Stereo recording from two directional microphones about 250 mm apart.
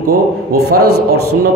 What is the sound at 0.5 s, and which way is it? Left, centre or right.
Speech, right.